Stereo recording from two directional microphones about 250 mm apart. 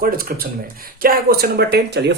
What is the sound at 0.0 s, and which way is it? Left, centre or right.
Speech, right.